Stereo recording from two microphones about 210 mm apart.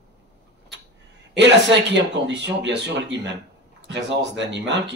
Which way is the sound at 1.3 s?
55° right (ahead or behind).